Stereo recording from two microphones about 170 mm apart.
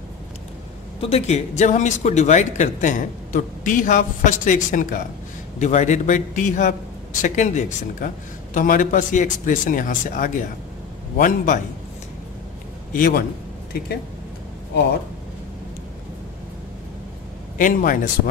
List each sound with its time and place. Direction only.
1.0 s speech: 40° left (ahead or behind)
12.9 s a man's voice: 55° left (ahead or behind)
17.6 s speech: 55° left (ahead or behind)